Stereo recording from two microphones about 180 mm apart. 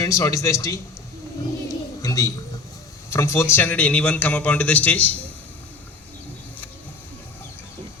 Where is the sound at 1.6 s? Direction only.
20° left (ahead or behind).